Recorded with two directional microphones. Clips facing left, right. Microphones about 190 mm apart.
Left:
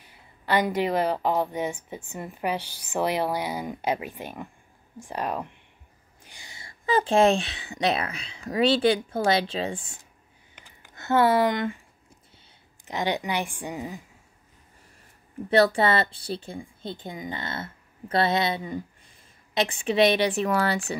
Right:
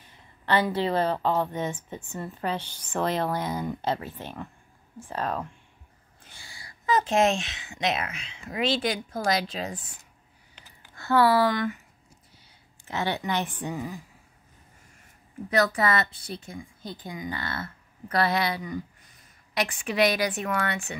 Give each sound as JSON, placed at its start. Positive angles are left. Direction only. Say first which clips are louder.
{"t": 0.1, "sound": "a woman's voice", "louder": "even", "side_deg": 15}
{"t": 11.0, "sound": "a woman's voice", "louder": "even", "side_deg": 20}
{"t": 12.8, "sound": "a woman's voice", "louder": "left 2 dB", "side_deg": 15}
{"t": 15.5, "sound": "a woman's voice", "louder": "left 4 dB", "side_deg": 30}